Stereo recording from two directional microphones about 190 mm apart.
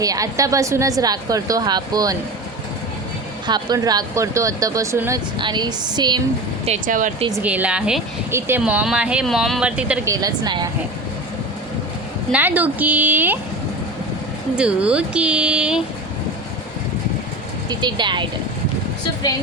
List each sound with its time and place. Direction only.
0.0 s speech: 20° right (ahead or behind)
3.4 s speech: 20° right (ahead or behind)
6.7 s speech: 45° right (ahead or behind)
7.4 s speech: 5° right (ahead or behind)
10.1 s speech: 20° right (ahead or behind)
12.3 s speech: 10° right (ahead or behind)
14.5 s speech: 5° right (ahead or behind)
17.7 s speech: 25° right (ahead or behind)